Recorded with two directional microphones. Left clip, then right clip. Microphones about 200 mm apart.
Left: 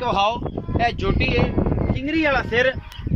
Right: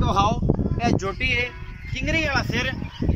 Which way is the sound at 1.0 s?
55° left (ahead or behind).